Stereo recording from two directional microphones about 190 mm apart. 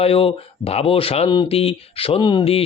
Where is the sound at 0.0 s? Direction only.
30° left (ahead or behind).